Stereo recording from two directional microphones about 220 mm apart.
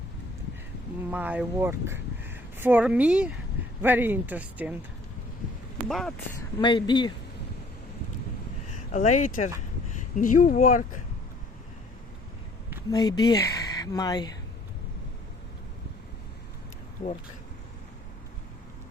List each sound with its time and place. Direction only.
1.1 s speech: 5° right (ahead or behind)
5.9 s speech: centre (ahead or behind)
6.6 s speech: 20° left (ahead or behind)
8.9 s speech: 35° left (ahead or behind)
12.9 s speech: 20° left (ahead or behind)